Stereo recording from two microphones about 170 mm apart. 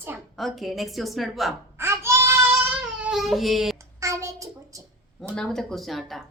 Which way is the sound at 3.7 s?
20° right (ahead or behind).